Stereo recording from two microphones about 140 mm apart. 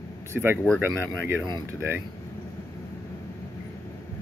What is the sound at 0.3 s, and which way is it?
Speech, 15° right (ahead or behind).